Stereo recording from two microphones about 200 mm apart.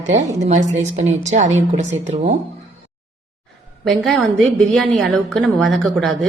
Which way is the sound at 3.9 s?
Centre (ahead or behind).